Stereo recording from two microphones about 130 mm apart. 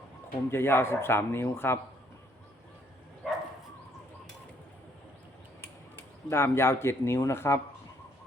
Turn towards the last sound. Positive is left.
turn(degrees=20)  # may be behind; listen again after turning